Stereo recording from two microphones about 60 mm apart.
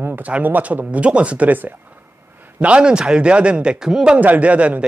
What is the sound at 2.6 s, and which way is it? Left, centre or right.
A man's voice, centre.